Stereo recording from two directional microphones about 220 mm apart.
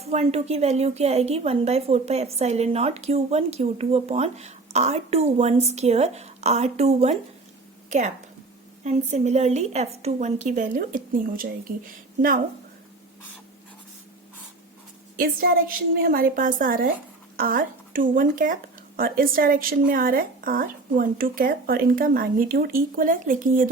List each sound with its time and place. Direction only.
0.0 s a woman's voice: 30° right (ahead or behind)
15.1 s speech: 40° right (ahead or behind)